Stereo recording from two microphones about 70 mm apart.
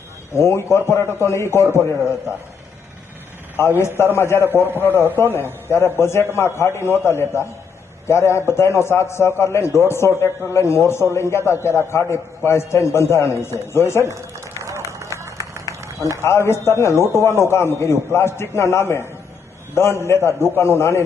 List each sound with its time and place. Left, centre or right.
0.3 s a man's voice: left
3.8 s a man's voice: left
14.8 s run: right
16.0 s a man's voice: right
16.2 s a man's voice: left